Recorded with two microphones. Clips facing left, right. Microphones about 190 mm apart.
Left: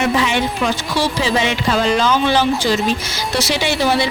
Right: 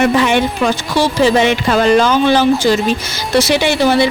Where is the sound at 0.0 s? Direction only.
55° right (ahead or behind).